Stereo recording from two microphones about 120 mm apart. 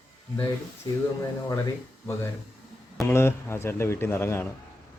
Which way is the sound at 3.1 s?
20° left (ahead or behind).